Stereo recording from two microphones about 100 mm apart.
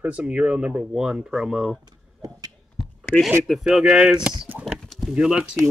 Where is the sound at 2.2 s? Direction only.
40° right (ahead or behind).